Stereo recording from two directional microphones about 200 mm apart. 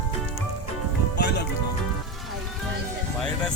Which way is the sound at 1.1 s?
55° left (ahead or behind).